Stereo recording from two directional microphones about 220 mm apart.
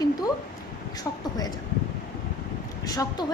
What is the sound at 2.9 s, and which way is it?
Speech, 15° left (ahead or behind).